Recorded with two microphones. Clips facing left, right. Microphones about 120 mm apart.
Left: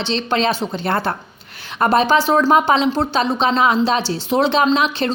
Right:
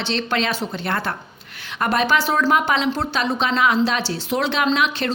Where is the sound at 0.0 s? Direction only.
25° left (ahead or behind).